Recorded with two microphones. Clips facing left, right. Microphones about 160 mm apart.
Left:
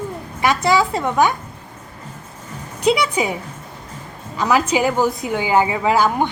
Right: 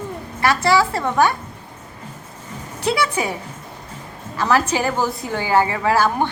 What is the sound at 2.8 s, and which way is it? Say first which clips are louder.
Speech: left 3 dB; 15° left (ahead or behind).